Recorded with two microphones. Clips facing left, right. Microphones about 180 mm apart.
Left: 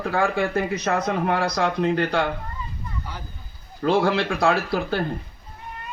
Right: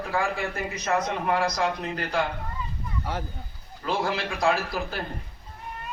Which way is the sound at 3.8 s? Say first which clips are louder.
Left 7 dB; 60° left (ahead or behind).